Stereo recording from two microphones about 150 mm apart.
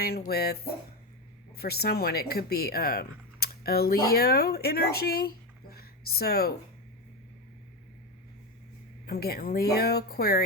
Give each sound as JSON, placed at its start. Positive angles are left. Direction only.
{"t": 0.0, "sound": "speech", "side_deg": 90}
{"t": 5.7, "sound": "a sound", "side_deg": 90}
{"t": 9.0, "sound": "speech", "side_deg": 90}